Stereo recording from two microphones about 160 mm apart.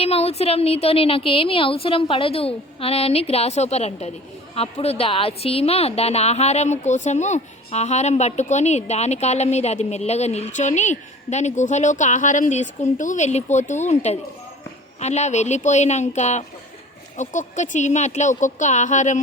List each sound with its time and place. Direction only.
0.0 s a woman's voice: 40° left (ahead or behind)